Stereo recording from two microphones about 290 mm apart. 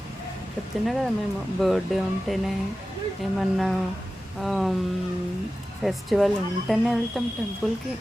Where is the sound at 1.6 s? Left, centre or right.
Centre.